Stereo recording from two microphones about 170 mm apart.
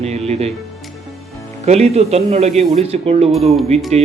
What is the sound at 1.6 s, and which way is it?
Speech, 40° right (ahead or behind).